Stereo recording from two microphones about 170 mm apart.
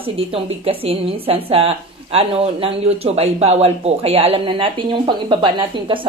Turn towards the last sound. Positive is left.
turn(degrees=-30)  # may be behind; listen again after turning